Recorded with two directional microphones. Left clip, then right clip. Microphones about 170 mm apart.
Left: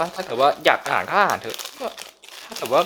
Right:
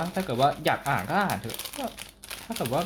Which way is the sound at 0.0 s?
30° left (ahead or behind).